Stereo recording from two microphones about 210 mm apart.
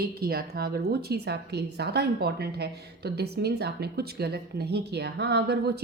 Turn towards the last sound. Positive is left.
turn(degrees=-50)  # may be behind; listen again after turning